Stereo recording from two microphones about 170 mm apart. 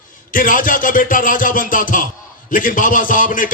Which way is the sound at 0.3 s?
55° left (ahead or behind).